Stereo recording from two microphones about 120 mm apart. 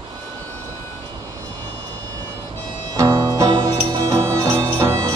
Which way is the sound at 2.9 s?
35° right (ahead or behind).